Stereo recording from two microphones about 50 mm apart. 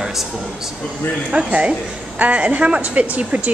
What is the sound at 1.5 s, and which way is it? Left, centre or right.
A woman's voice, right.